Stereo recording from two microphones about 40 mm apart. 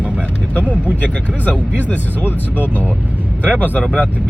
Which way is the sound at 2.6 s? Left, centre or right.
Right.